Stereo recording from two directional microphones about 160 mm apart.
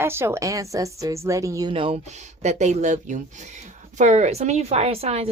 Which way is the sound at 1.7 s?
35° right (ahead or behind).